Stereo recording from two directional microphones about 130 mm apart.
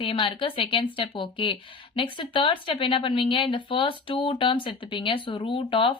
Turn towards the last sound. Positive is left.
turn(degrees=40)  # may be behind; listen again after turning